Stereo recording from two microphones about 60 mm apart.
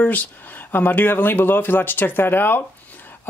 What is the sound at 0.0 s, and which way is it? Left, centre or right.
Speech, left.